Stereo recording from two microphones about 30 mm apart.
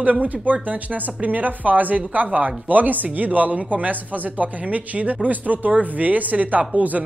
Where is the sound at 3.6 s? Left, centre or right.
Right.